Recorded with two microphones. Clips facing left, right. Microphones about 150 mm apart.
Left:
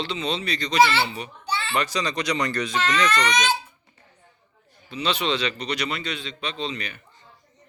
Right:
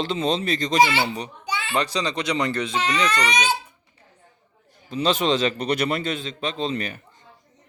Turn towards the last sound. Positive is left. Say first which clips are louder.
# right 4 dB
turn(degrees=-45)  # may be behind; listen again after turning